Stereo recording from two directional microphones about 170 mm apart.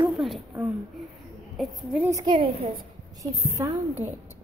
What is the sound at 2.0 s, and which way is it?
A woman's voice, 20° right (ahead or behind).